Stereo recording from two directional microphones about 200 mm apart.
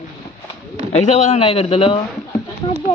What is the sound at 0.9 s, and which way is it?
Speech, 35° left (ahead or behind).